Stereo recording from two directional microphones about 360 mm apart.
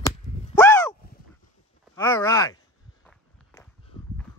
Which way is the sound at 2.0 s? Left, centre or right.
Centre.